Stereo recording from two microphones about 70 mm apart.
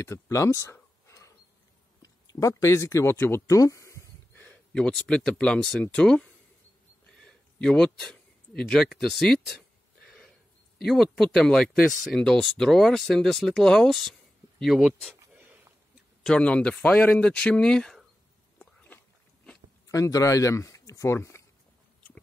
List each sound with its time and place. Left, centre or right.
0.0 s speech: left
1.0 s a sound: left
2.0 s speech: left
3.4 s speech: left
4.4 s speech: centre
7.6 s speech: centre
8.8 s a sound: centre
10.9 s speech: centre
15.3 s a sound: right
16.2 s speech: centre
18.9 s biting: left
19.9 s speech: left